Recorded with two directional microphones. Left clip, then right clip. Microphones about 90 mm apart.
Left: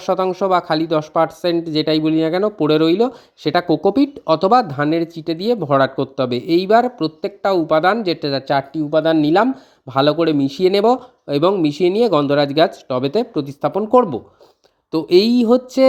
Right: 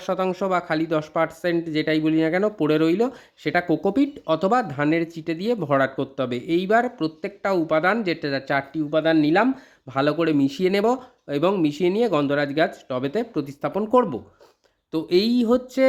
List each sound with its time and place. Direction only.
0.0 s speech: 35° left (ahead or behind)
0.3 s speech: 25° left (ahead or behind)
14.9 s speech: 40° left (ahead or behind)